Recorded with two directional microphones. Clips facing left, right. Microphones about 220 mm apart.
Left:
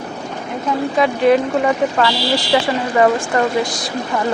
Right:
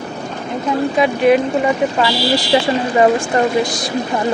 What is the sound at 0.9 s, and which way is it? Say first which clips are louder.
Speech: even; 15° right (ahead or behind).